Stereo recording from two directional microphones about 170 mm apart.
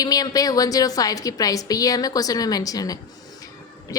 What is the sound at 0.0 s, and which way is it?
A woman's voice, 20° left (ahead or behind).